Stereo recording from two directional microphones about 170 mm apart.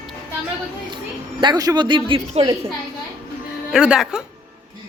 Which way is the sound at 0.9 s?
25° right (ahead or behind).